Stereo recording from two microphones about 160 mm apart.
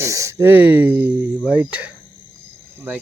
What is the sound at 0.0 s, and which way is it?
Speech, 20° right (ahead or behind).